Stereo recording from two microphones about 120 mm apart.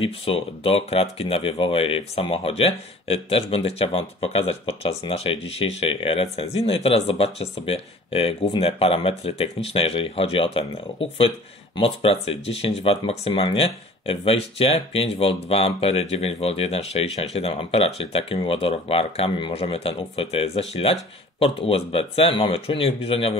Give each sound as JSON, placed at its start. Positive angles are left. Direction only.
{"t": 0.0, "sound": "speech", "side_deg": 50}